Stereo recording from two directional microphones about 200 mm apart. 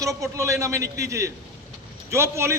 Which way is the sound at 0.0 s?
15° right (ahead or behind).